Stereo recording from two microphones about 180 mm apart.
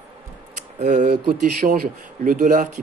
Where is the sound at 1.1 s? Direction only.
55° right (ahead or behind).